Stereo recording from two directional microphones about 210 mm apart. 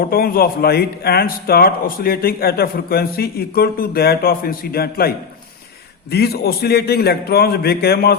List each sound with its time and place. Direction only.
0.0 s speech: 45° left (ahead or behind)